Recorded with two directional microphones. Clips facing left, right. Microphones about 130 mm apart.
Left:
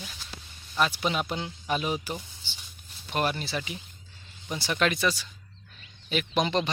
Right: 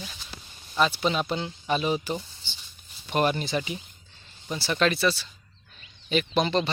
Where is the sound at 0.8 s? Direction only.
10° left (ahead or behind).